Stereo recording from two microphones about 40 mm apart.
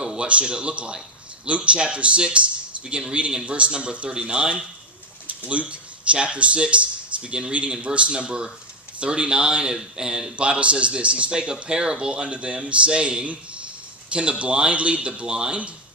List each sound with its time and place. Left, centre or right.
0.0 s a sound: right
0.3 s a man's voice: right
5.2 s a man's voice: right; by 10.3 s centre
10.3 s a man's voice: right